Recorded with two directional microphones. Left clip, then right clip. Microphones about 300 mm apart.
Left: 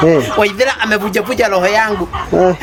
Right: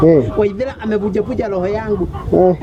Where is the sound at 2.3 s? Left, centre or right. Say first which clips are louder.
Even; centre.